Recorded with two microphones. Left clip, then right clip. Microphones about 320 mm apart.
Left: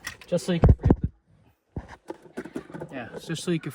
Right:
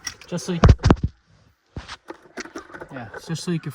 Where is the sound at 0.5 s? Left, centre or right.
Left.